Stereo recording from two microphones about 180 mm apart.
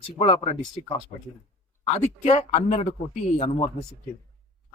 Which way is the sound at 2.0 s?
35° left (ahead or behind).